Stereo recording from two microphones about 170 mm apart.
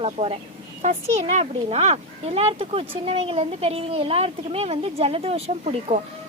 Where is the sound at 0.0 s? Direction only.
35° right (ahead or behind).